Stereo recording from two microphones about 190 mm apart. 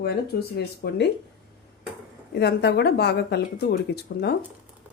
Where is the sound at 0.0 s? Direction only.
60° left (ahead or behind).